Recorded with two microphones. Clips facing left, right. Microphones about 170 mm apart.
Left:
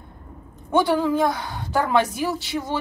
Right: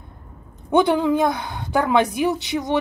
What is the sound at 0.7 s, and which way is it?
A woman's voice, 20° right (ahead or behind).